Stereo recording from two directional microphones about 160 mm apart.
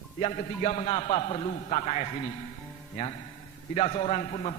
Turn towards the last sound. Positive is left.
turn(degrees=40)  # may be behind; listen again after turning